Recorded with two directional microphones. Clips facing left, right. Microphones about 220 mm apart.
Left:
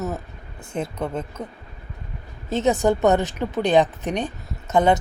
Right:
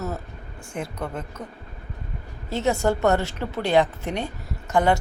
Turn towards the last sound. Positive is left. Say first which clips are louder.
# left 2 dB
turn(degrees=20)  # may be behind; listen again after turning